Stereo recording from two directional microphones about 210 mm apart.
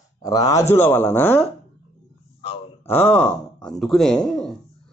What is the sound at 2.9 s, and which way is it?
Speech, 10° left (ahead or behind).